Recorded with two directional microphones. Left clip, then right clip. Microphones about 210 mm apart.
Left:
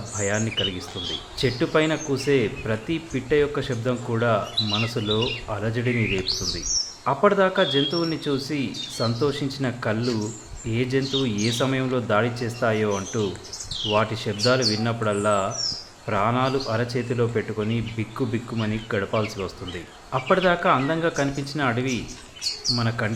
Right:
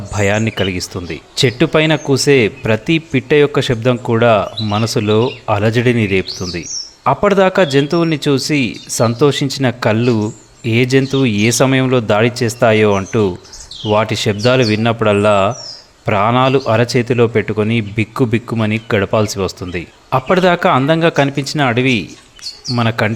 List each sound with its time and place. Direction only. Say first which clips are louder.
0.2 s a man's voice: right 9 dB; 50° right (ahead or behind)